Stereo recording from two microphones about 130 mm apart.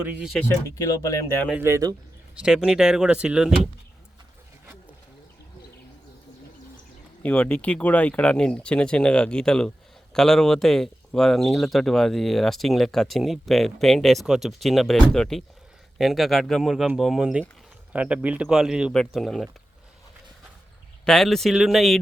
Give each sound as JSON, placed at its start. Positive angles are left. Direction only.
{"t": 0.0, "sound": "speech", "side_deg": -10}
{"t": 0.8, "sound": "speech", "side_deg": 25}
{"t": 1.5, "sound": "speech", "side_deg": -20}
{"t": 2.3, "sound": "speech", "side_deg": -5}
{"t": 7.2, "sound": "speech", "side_deg": 10}
{"t": 21.0, "sound": "speech", "side_deg": 5}